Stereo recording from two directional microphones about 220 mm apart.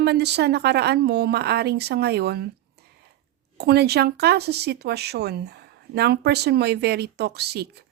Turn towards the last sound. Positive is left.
turn(degrees=-45)  # may be behind; listen again after turning